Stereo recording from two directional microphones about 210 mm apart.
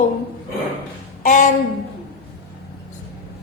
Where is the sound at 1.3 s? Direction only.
40° left (ahead or behind).